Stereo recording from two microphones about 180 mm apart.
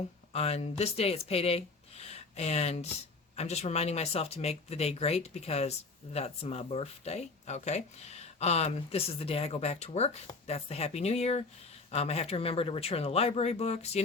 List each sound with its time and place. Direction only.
0.3 s speech: 35° left (ahead or behind)